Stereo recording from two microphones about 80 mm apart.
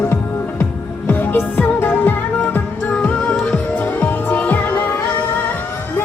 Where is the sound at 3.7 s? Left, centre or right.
Left.